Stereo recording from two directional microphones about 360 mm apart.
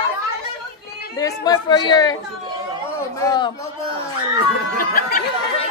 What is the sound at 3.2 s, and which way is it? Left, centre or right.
Speech, centre.